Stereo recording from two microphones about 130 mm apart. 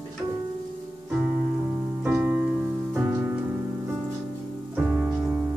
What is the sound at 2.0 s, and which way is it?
Music, 10° right (ahead or behind).